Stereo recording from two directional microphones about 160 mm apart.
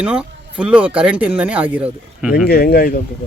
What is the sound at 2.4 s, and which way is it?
Speech, 75° left (ahead or behind).